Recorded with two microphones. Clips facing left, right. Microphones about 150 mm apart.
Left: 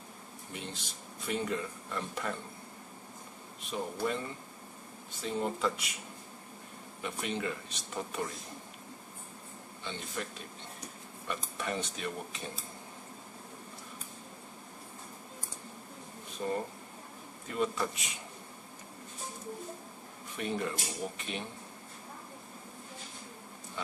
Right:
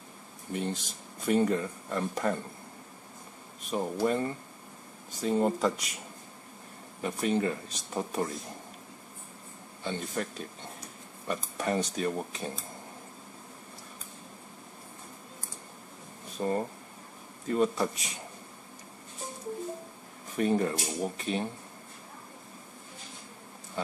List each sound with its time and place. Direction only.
0.5 s speech: 45° right (ahead or behind)
3.7 s speech: 40° right (ahead or behind)
7.0 s speech: 40° right (ahead or behind)
9.8 s speech: 45° right (ahead or behind)
11.2 s speech: 40° right (ahead or behind)
16.4 s speech: 45° right (ahead or behind)
20.3 s speech: 40° right (ahead or behind)